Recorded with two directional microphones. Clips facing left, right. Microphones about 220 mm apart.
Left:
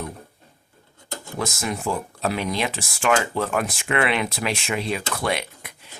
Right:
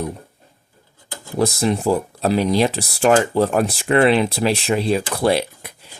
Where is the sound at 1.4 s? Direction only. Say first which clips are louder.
Right 9 dB; 35° right (ahead or behind).